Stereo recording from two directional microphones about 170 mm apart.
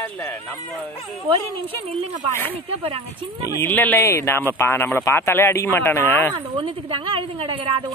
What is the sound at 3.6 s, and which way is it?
Speech, 10° left (ahead or behind).